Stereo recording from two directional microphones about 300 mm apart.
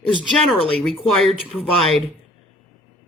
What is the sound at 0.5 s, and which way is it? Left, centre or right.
Speech, centre.